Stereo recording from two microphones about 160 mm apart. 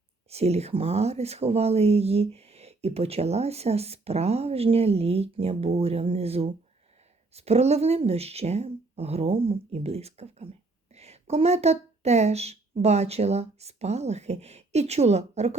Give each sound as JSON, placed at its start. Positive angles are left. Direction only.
{"t": 0.3, "sound": "speech", "side_deg": -40}